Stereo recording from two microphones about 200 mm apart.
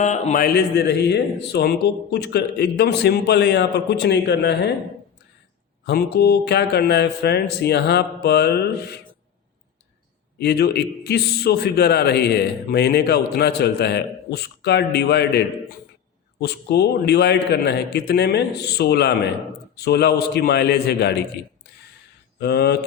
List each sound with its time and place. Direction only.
0.0 s a man's voice: 35° left (ahead or behind); by 4.7 s 55° left (ahead or behind)
5.8 s a man's voice: 50° left (ahead or behind)
10.3 s a man's voice: 55° left (ahead or behind)
22.4 s speech: 55° left (ahead or behind)